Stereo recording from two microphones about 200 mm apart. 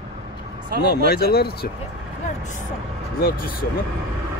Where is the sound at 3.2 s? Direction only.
45° left (ahead or behind).